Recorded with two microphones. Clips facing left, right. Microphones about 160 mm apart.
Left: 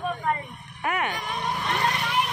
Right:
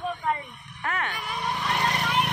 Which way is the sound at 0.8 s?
15° left (ahead or behind).